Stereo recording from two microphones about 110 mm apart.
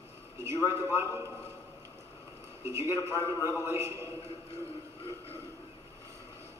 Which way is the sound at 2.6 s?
25° right (ahead or behind).